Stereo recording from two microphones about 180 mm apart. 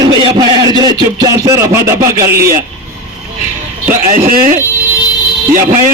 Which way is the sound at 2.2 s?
55° right (ahead or behind).